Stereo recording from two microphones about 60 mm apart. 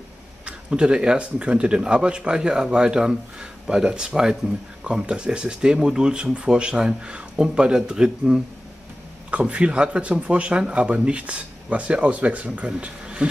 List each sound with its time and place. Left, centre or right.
0.5 s speech: centre